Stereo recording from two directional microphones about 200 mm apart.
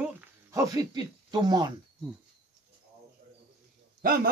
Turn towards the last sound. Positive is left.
turn(degrees=-45)  # may be behind; listen again after turning